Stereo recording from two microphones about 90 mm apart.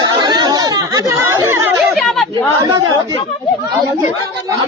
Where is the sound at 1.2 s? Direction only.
30° right (ahead or behind).